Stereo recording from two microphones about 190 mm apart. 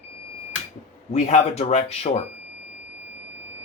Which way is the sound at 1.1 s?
35° left (ahead or behind).